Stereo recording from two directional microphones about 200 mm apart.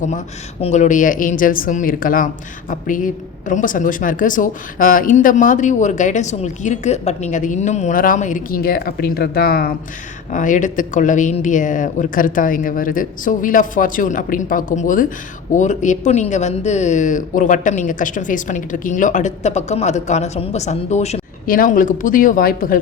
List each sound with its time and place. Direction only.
0.6 s speech: 35° left (ahead or behind)